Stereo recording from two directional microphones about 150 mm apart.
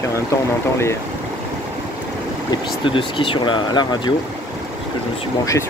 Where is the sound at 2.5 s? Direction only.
35° left (ahead or behind).